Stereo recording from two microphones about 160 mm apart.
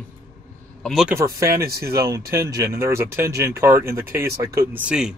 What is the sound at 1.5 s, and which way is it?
Speech, 75° right (ahead or behind).